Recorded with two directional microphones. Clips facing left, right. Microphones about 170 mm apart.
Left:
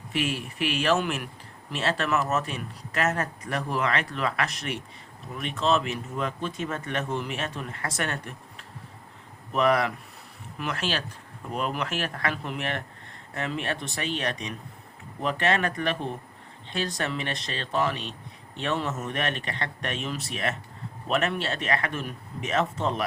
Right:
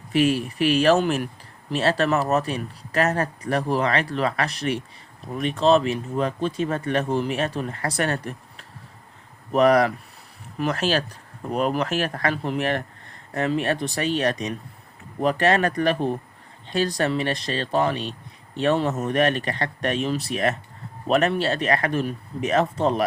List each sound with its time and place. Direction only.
0.1 s speech: 40° right (ahead or behind)
9.5 s speech: 40° right (ahead or behind)